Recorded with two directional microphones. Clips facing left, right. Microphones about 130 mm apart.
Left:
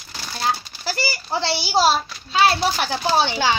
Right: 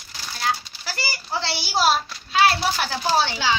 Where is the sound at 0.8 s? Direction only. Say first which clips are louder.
Left 5 dB; 30° left (ahead or behind).